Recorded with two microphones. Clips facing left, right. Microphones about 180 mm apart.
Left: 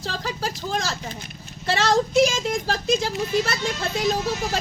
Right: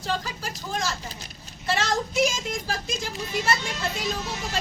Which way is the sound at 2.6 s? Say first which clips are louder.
Left 8 dB; 75° left (ahead or behind).